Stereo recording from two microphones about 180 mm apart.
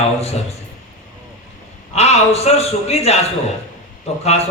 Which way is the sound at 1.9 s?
35° left (ahead or behind).